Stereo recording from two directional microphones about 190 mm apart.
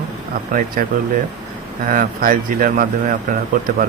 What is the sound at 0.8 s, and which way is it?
Speech, 50° right (ahead or behind).